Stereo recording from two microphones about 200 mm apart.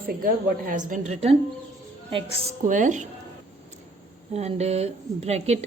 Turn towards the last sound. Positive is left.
turn(degrees=-35)  # may be behind; listen again after turning